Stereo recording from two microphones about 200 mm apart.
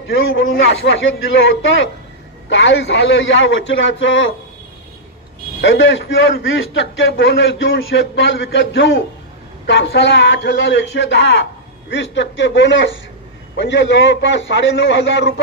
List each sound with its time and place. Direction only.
0.1 s a man's voice: 75° left (ahead or behind)
5.6 s a man's voice: 70° left (ahead or behind)